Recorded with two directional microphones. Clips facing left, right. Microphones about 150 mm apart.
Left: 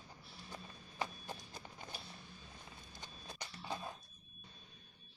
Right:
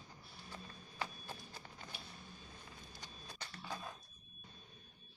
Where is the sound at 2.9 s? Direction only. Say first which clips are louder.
Left 2 dB; 20° left (ahead or behind).